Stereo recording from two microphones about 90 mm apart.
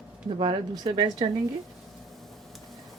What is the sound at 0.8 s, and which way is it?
Speech, 60° right (ahead or behind).